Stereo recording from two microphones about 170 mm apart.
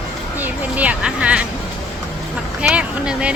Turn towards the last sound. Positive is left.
turn(degrees=-5)  # may be behind; listen again after turning